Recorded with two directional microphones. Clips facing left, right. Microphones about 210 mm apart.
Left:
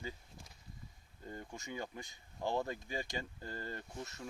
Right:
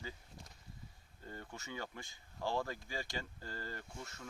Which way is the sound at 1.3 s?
15° left (ahead or behind).